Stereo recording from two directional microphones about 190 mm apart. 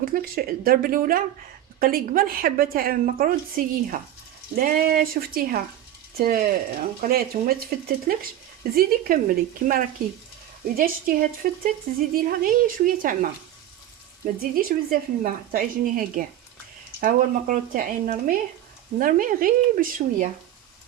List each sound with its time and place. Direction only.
0.0 s a woman's voice: 50° right (ahead or behind)
14.5 s a woman's voice: 50° right (ahead or behind)